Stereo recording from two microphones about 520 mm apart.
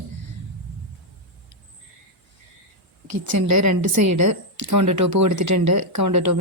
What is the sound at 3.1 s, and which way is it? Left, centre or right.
A woman's voice, right.